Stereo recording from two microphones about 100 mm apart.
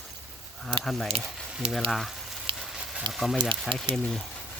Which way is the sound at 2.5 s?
65° right (ahead or behind).